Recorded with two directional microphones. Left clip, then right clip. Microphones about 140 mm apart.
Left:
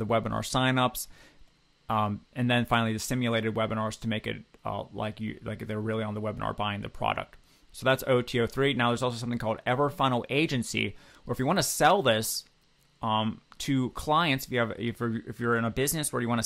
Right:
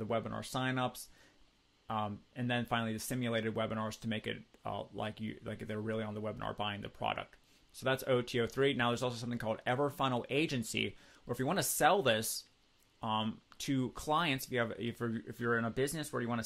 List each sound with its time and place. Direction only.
0.0 s speech: 35° left (ahead or behind)